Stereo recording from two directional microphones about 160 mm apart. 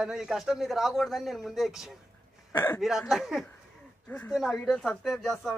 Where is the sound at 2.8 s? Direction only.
Centre (ahead or behind).